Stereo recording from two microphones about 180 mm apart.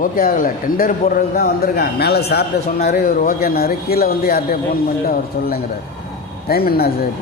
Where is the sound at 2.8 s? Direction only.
45° left (ahead or behind).